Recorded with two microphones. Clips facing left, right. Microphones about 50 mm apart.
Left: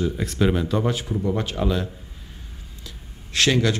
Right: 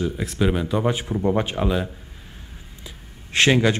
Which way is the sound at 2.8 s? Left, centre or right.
Right.